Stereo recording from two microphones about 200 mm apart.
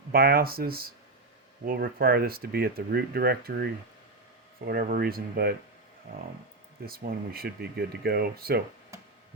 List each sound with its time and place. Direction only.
0.1 s speech: 50° right (ahead or behind)
6.8 s speech: 50° right (ahead or behind)